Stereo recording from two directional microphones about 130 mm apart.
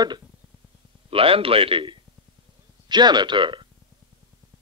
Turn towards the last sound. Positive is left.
turn(degrees=-40)  # may be behind; listen again after turning